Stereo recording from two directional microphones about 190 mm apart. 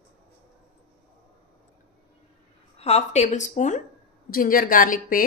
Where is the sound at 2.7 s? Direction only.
35° left (ahead or behind).